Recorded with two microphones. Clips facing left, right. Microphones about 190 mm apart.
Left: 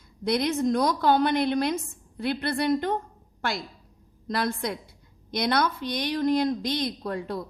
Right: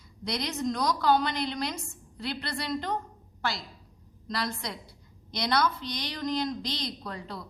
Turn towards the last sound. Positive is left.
turn(degrees=55)  # may be behind; listen again after turning